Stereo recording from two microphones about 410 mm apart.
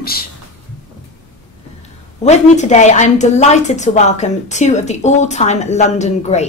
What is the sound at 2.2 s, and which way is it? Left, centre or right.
A woman's voice, centre.